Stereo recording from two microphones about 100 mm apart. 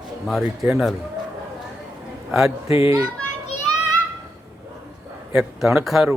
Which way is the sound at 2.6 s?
70° left (ahead or behind).